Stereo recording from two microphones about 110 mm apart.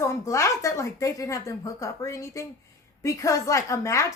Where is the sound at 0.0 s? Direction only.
25° left (ahead or behind).